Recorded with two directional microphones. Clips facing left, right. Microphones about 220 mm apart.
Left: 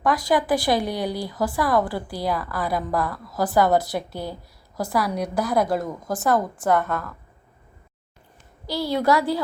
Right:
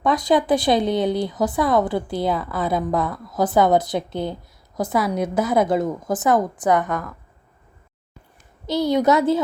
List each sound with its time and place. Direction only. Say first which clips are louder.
0.0 s speech: right 3 dB; 20° right (ahead or behind)
8.6 s speech: right 4 dB; 20° right (ahead or behind)